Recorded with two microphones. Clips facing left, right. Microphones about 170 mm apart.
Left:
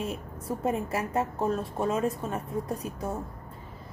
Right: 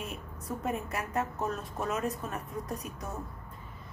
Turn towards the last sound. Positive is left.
turn(degrees=30)  # may be behind; listen again after turning